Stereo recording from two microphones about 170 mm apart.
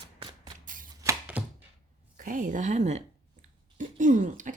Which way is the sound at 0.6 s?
50° right (ahead or behind).